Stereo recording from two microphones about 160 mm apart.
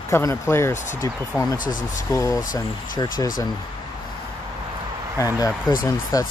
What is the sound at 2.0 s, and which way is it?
Speech, 20° left (ahead or behind).